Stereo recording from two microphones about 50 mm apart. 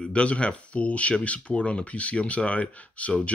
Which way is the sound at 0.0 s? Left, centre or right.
Left.